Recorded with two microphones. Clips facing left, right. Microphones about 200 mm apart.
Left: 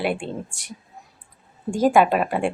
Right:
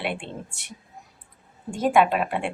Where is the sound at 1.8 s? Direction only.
Centre (ahead or behind).